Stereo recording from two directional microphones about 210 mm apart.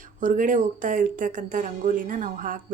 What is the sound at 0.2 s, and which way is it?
Speech, 40° right (ahead or behind).